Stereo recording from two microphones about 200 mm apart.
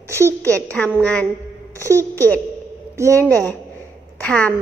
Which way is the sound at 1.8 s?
15° right (ahead or behind).